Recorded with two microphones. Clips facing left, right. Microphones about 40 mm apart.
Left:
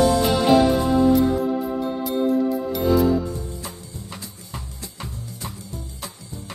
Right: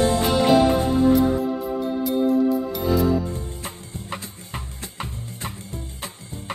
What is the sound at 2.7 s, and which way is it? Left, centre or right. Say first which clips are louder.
Music: left 2 dB; centre.